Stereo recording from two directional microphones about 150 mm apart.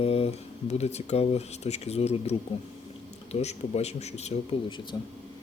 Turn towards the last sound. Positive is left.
turn(degrees=35)  # may be behind; listen again after turning